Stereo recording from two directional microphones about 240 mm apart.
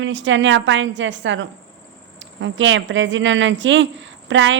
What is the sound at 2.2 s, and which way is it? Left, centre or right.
Speech, right.